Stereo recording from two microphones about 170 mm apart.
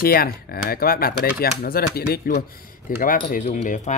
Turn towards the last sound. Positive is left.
turn(degrees=45)  # may be behind; listen again after turning